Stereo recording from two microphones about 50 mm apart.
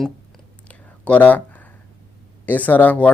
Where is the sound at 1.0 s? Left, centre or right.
Left.